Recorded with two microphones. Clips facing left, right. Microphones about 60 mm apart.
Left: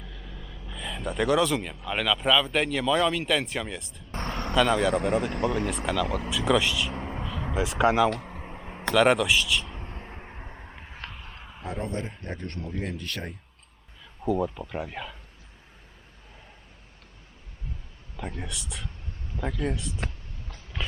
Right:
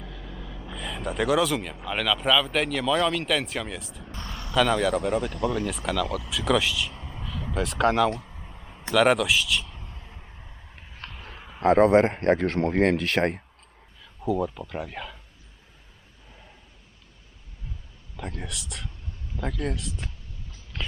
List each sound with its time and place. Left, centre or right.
0.0 s vehicle: centre
0.7 s speech: centre
4.1 s vehicle: left
4.5 s speech: centre
5.3 s speech: left
5.5 s speech: centre
6.9 s a sound: left
7.5 s speech: centre
8.2 s a sound: left
9.0 s speech: centre
9.7 s a sound: left
11.6 s speech: right
14.0 s a man's voice: centre
18.2 s speech: centre